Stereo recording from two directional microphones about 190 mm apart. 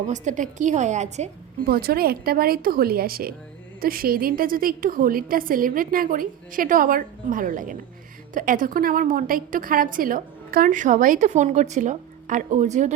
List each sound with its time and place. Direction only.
0.1 s a woman's voice: 40° right (ahead or behind)
1.6 s a woman's voice: 55° right (ahead or behind); by 12.9 s 40° right (ahead or behind)